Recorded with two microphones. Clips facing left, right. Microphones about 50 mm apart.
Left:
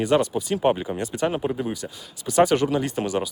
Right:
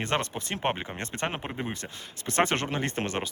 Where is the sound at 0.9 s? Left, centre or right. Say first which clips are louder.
Left 7 dB; right.